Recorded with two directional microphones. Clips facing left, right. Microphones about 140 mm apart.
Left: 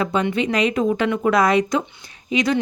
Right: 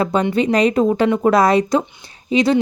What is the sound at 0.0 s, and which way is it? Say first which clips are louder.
Speech: right 4 dB; 35° right (ahead or behind).